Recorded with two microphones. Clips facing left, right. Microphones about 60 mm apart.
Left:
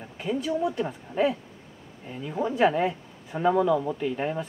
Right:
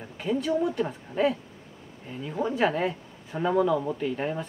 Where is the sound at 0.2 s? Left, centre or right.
Left.